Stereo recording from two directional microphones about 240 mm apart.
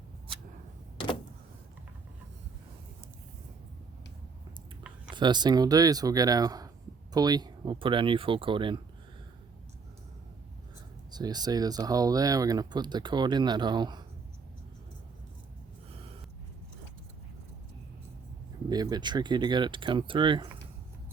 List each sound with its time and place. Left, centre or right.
0.9 s vehicle: left
5.1 s speech: centre
11.1 s speech: centre
18.7 s speech: centre